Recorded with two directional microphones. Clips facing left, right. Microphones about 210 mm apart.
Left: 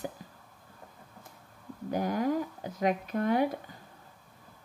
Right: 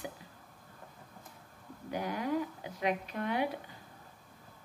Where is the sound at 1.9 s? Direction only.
45° left (ahead or behind).